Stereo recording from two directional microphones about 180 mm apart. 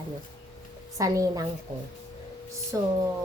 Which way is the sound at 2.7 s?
15° right (ahead or behind).